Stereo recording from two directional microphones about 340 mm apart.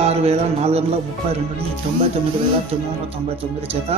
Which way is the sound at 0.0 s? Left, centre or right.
Centre.